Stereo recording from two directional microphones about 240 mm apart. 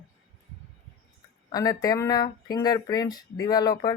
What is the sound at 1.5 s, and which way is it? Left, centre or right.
Speech, centre.